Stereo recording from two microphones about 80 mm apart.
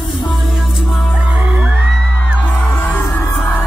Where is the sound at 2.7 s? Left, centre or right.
Left.